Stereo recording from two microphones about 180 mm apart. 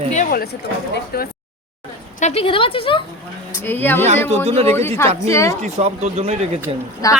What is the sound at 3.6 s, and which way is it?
Speech, 10° left (ahead or behind).